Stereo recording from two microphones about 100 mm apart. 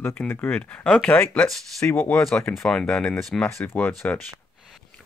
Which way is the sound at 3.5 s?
25° left (ahead or behind).